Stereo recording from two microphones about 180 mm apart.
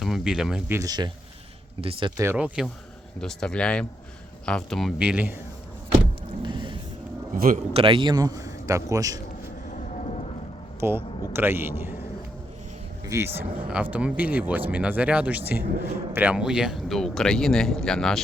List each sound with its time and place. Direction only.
0.0 s speech: centre (ahead or behind)
0.8 s speech: 20° right (ahead or behind)
2.2 s speech: 10° right (ahead or behind)
3.2 s speech: 5° left (ahead or behind)
6.4 s vehicle: 25° right (ahead or behind)
7.3 s speech: 50° right (ahead or behind)
7.7 s speech: 30° right (ahead or behind)
10.0 s a sound: 35° left (ahead or behind)
10.8 s speech: 15° right (ahead or behind)
13.1 s speech: 15° right (ahead or behind); by 18.2 s 5° left (ahead or behind)